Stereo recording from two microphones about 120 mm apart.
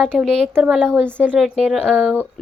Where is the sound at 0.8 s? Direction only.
15° right (ahead or behind); by 1.9 s centre (ahead or behind).